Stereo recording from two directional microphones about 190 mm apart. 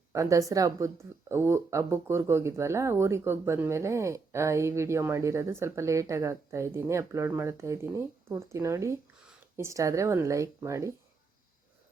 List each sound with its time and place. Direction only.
0.1 s speech: 15° right (ahead or behind)